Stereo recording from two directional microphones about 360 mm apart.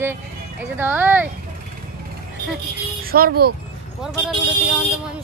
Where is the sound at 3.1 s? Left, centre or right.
Right.